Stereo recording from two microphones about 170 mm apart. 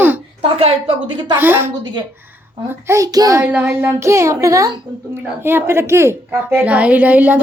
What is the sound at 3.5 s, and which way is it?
A child's voice, 10° right (ahead or behind).